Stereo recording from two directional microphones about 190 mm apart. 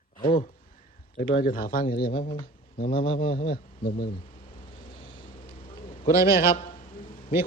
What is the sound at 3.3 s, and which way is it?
Speech, 50° left (ahead or behind).